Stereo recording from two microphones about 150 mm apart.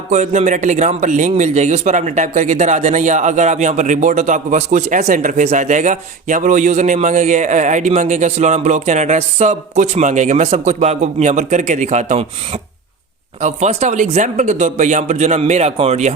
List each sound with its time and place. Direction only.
0.1 s a man's voice: 55° right (ahead or behind)
13.4 s a man's voice: 45° right (ahead or behind)